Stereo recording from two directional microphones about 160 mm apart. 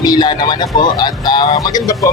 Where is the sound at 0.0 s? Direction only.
25° left (ahead or behind).